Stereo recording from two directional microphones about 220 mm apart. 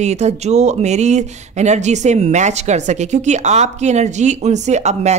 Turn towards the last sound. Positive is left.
turn(degrees=-30)  # may be behind; listen again after turning